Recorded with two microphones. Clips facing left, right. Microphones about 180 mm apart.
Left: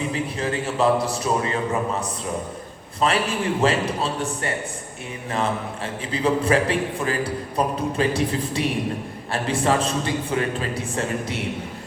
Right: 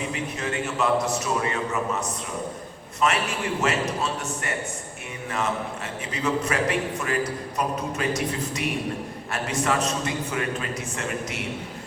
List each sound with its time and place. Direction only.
0.1 s a man's voice: 30° left (ahead or behind)